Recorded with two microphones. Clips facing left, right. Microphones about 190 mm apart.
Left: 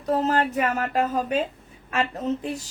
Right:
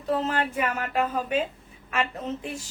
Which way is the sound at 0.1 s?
40° left (ahead or behind).